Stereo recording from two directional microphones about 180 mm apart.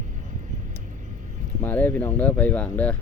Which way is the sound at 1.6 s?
10° left (ahead or behind).